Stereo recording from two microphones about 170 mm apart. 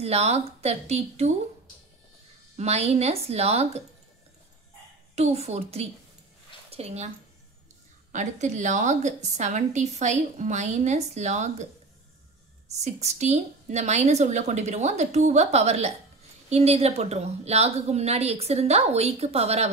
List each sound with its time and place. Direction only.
0.0 s a woman's voice: 40° right (ahead or behind)
2.5 s a woman's voice: 40° right (ahead or behind)
5.1 s a woman's voice: 40° right (ahead or behind)
8.1 s a woman's voice: 45° right (ahead or behind)
12.8 s a woman's voice: 40° right (ahead or behind)